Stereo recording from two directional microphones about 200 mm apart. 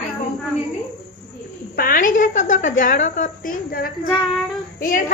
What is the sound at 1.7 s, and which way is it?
A woman's voice, 45° left (ahead or behind).